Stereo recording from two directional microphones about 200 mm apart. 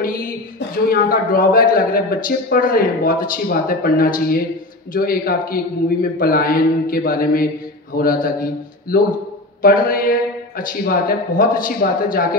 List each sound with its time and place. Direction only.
0.6 s a man's voice: 45° left (ahead or behind)